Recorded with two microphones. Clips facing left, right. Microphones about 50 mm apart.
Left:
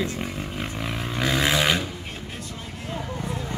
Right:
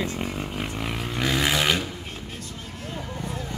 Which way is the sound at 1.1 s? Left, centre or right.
Centre.